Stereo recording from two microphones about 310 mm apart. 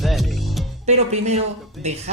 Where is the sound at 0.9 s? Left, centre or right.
Right.